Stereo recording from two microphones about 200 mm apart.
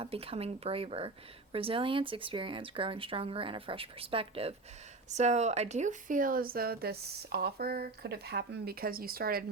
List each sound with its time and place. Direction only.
0.0 s speech: 30° right (ahead or behind); by 9.4 s 45° right (ahead or behind)